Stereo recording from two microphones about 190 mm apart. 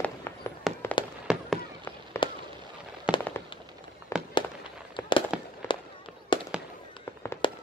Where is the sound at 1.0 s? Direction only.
25° left (ahead or behind).